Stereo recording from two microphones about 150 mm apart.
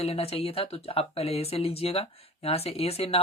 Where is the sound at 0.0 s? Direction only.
40° left (ahead or behind).